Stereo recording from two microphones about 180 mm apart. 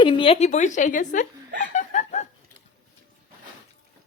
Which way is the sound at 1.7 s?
40° left (ahead or behind).